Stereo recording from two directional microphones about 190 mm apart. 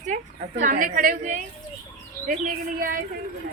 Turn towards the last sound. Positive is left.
turn(degrees=-50)  # may be behind; listen again after turning